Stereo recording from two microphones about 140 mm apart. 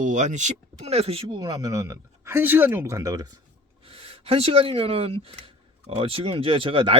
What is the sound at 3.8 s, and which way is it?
Speech, 45° right (ahead or behind).